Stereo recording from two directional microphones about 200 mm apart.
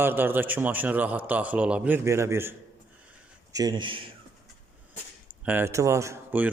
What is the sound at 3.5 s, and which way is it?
Speech, 20° right (ahead or behind).